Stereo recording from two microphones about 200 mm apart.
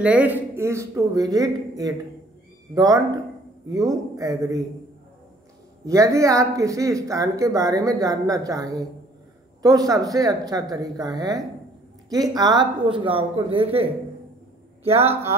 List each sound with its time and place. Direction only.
0.0 s speech: 5° right (ahead or behind)
5.9 s speech: 15° right (ahead or behind)
14.9 s speech: 30° right (ahead or behind)